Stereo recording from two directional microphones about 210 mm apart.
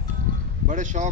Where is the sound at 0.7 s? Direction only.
35° right (ahead or behind).